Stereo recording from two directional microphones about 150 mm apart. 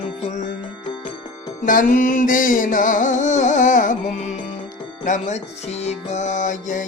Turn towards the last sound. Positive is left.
turn(degrees=55)  # may be behind; listen again after turning